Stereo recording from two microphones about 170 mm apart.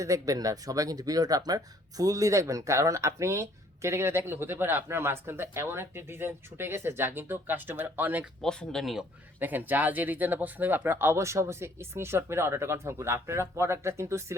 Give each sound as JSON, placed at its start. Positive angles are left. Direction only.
{"t": 0.0, "sound": "speech", "side_deg": -20}
{"t": 8.4, "sound": "speech", "side_deg": 0}